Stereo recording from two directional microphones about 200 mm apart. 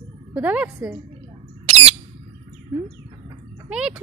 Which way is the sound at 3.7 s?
5° right (ahead or behind).